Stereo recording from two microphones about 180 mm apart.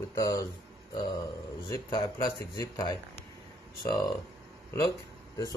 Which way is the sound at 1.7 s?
25° left (ahead or behind).